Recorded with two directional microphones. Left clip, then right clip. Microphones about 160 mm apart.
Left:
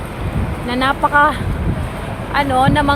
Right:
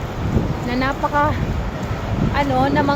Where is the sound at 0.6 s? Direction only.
Centre (ahead or behind).